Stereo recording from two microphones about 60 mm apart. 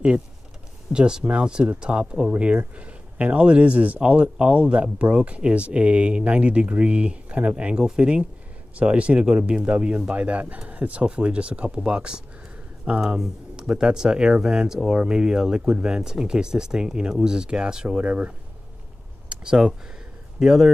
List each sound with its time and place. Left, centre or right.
0.9 s speech: centre
19.2 s a sound: centre
20.3 s speech: centre